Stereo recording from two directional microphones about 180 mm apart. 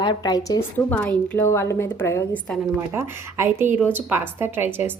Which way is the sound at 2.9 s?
15° right (ahead or behind).